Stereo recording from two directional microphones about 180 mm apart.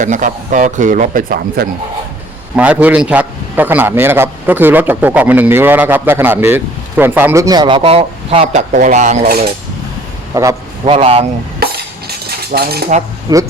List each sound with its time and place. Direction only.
0.0 s speech: 45° right (ahead or behind)
2.6 s a man's voice: 10° right (ahead or behind); by 9.3 s 40° right (ahead or behind)
10.3 s a man's voice: 15° right (ahead or behind)
10.8 s a man's voice: 30° right (ahead or behind)
11.6 s stir: 60° right (ahead or behind)
13.3 s speech: 20° right (ahead or behind)